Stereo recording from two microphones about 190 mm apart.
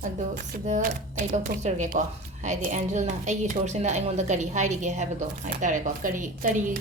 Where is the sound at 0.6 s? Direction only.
40° right (ahead or behind).